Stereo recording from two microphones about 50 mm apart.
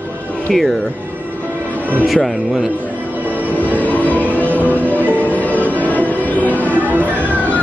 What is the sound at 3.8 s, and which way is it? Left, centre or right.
Music, left.